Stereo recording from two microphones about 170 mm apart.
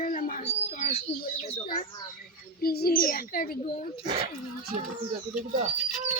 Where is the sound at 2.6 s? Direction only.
65° left (ahead or behind).